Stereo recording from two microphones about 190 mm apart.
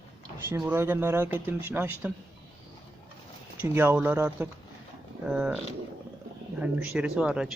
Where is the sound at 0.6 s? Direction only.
10° right (ahead or behind).